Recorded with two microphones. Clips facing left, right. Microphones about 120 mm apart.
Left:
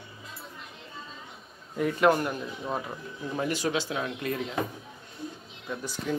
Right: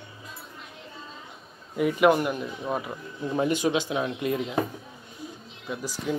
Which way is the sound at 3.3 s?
20° right (ahead or behind).